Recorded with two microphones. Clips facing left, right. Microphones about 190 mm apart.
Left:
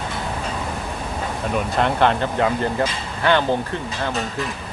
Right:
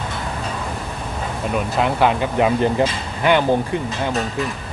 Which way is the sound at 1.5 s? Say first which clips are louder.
Right 1 dB; 5° right (ahead or behind).